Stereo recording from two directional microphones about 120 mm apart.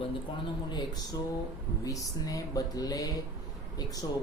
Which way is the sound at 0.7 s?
35° left (ahead or behind).